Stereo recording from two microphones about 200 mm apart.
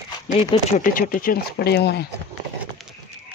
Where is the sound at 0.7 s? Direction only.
45° left (ahead or behind).